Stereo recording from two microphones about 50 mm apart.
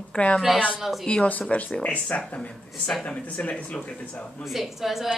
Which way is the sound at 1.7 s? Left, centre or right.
Left.